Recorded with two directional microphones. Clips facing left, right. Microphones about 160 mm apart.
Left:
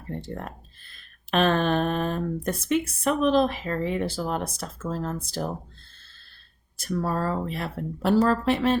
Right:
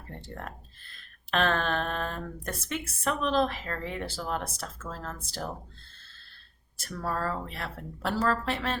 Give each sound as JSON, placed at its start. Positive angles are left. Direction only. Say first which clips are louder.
{"t": 0.2, "sound": "speech", "louder": "left 6 dB", "side_deg": 20}
{"t": 6.7, "sound": "speech", "louder": "left 6 dB", "side_deg": 15}